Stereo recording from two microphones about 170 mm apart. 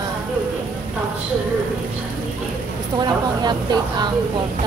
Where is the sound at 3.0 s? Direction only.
25° right (ahead or behind).